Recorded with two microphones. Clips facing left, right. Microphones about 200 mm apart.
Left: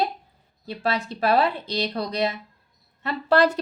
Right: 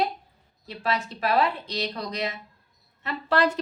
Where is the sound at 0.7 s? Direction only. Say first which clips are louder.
Left 2 dB; 35° left (ahead or behind).